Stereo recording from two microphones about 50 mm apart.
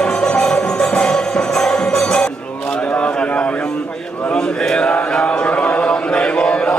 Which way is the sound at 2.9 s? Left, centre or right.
Left.